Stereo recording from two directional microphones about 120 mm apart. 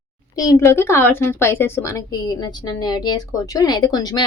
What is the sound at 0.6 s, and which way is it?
A woman's voice, 20° left (ahead or behind).